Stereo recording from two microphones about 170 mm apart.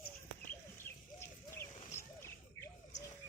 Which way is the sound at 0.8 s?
15° left (ahead or behind).